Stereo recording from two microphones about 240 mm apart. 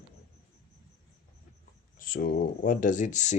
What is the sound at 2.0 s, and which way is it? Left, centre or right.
Speech, left.